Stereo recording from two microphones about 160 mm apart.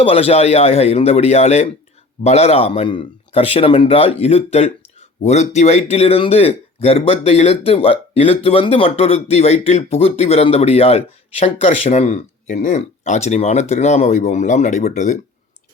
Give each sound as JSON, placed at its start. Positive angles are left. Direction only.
{"t": 0.0, "sound": "speech", "side_deg": 40}